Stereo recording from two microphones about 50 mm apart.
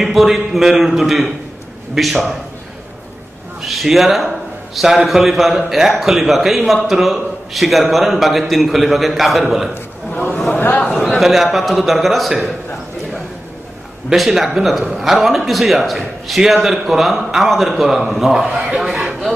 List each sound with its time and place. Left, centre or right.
0.0 s a man's voice: centre
3.6 s a man's voice: centre
10.5 s a sound: left
11.1 s a man's voice: centre
14.1 s a man's voice: centre